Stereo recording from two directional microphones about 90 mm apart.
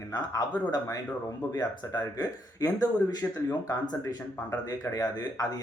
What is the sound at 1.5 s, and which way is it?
Speech, 50° left (ahead or behind).